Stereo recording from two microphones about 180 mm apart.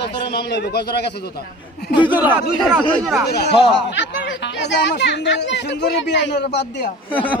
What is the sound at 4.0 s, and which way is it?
Speech, 90° left.